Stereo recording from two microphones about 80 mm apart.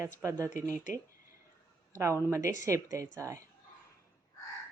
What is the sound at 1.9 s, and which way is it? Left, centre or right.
Speech, right.